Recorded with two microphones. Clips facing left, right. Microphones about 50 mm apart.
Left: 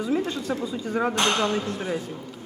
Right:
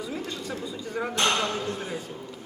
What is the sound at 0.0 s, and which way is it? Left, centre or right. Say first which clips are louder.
Speech: left 8 dB; left.